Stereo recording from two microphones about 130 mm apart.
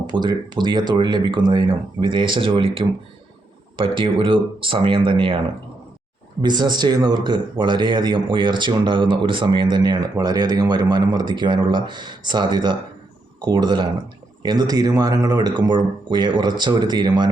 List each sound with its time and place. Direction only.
0.1 s speech: 35° right (ahead or behind)
6.4 s speech: 35° right (ahead or behind)